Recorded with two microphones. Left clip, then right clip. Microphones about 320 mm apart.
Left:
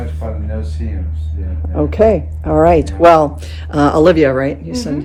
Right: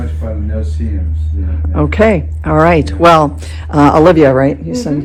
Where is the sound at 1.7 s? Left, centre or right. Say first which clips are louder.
Right 1 dB; right.